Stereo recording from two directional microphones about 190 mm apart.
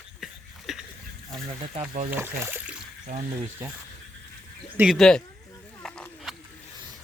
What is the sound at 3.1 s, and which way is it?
Speech, 35° right (ahead or behind).